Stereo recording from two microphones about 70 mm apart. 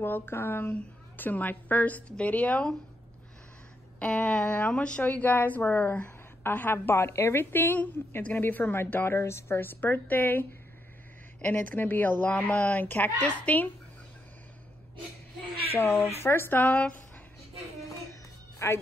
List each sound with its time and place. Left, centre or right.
0.0 s speech: left
4.0 s speech: centre
11.4 s speech: left
12.3 s speech: centre
15.8 s speech: left
18.6 s speech: left